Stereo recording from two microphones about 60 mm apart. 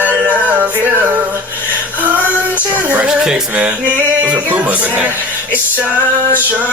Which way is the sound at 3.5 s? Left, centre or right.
Right.